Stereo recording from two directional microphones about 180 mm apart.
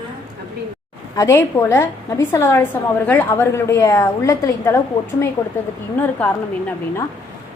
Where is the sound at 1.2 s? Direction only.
15° left (ahead or behind).